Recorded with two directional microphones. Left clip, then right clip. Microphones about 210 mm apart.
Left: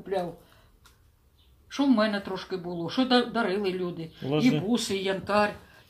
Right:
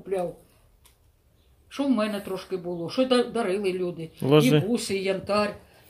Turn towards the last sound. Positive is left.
turn(degrees=-10)  # may be behind; listen again after turning